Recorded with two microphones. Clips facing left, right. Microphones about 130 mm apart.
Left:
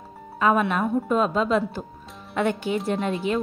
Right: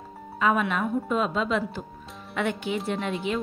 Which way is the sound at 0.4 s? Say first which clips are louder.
Left 3 dB; 40° left (ahead or behind).